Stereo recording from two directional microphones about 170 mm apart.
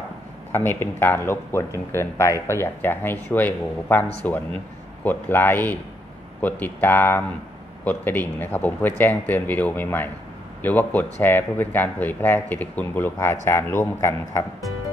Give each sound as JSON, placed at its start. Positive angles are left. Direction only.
{"t": 0.5, "sound": "a man's voice", "side_deg": 15}